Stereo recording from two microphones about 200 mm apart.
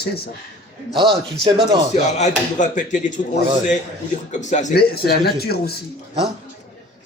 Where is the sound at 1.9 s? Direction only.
35° left (ahead or behind).